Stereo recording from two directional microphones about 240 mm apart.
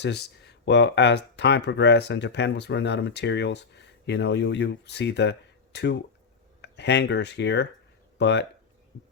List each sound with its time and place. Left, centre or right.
0.0 s speech: left